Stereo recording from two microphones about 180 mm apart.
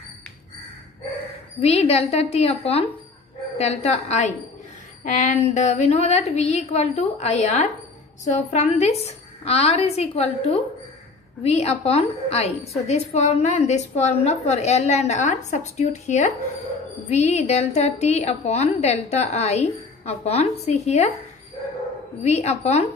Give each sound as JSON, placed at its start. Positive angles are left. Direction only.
{"t": 1.6, "sound": "a woman's voice", "side_deg": 35}
{"t": 22.2, "sound": "a woman's voice", "side_deg": 40}